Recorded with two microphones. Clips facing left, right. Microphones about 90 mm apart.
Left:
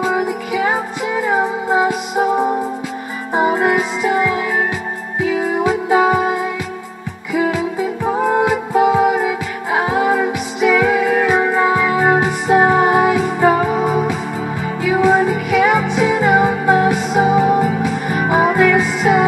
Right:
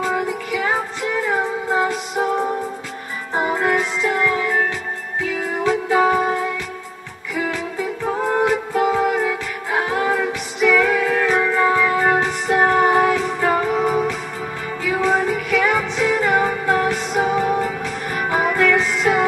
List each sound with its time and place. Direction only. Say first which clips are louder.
0.0 s music: left 4 dB; 15° left (ahead or behind)
5.6 s music: left 1 dB; 15° left (ahead or behind)
8.0 s music: left 3 dB; 15° left (ahead or behind)